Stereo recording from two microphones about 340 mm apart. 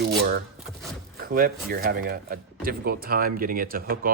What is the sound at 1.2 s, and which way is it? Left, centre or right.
Speech, right.